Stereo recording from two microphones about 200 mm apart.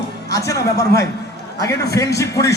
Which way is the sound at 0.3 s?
15° left (ahead or behind).